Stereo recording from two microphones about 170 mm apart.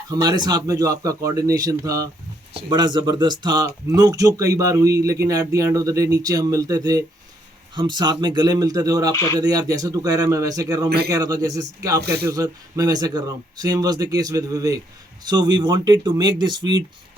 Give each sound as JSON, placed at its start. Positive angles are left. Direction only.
{"t": 0.1, "sound": "speech", "side_deg": -25}
{"t": 9.1, "sound": "speech", "side_deg": 15}
{"t": 9.4, "sound": "speech", "side_deg": -20}
{"t": 10.8, "sound": "a man's voice", "side_deg": -65}
{"t": 11.1, "sound": "speech", "side_deg": -20}